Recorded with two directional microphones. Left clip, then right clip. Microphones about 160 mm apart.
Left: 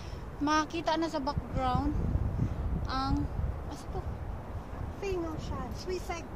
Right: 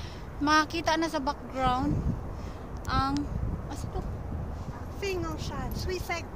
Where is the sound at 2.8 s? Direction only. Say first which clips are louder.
Right 5 dB; 15° right (ahead or behind).